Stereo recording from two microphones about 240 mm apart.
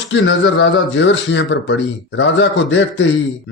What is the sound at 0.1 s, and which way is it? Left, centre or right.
Speech, left.